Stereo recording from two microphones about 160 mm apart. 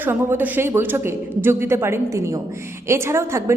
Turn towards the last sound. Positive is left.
turn(degrees=-15)  # may be behind; listen again after turning